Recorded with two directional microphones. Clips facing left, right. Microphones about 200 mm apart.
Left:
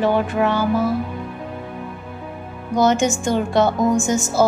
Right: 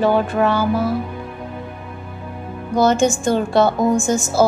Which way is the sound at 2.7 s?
15° left (ahead or behind).